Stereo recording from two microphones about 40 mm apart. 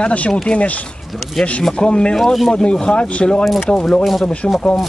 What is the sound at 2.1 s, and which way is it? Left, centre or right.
Speech, centre.